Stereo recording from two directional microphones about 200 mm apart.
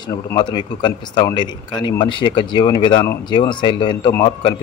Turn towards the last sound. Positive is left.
turn(degrees=20)  # may be behind; listen again after turning